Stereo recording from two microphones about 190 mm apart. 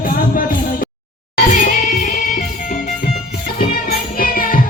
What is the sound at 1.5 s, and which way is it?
Music, 40° left (ahead or behind).